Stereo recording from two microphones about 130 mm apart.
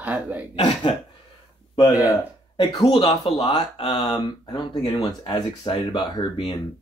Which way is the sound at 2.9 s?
45° left (ahead or behind).